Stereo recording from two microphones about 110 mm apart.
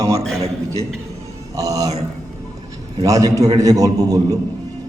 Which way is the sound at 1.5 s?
30° right (ahead or behind).